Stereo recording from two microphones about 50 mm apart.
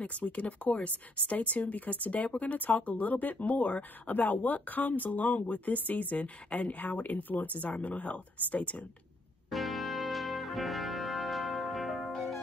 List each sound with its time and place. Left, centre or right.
0.0 s speech: left
9.5 s music: centre